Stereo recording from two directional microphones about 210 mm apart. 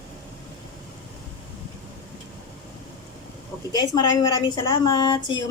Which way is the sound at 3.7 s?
20° left (ahead or behind).